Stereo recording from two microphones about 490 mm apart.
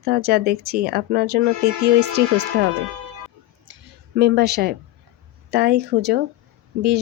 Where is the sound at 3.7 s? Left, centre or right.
Right.